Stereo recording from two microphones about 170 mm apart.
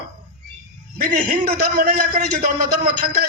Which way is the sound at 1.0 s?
65° right (ahead or behind).